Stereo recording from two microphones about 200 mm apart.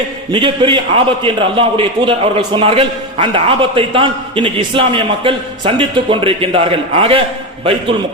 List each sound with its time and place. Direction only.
0.3 s a man's voice: 25° right (ahead or behind)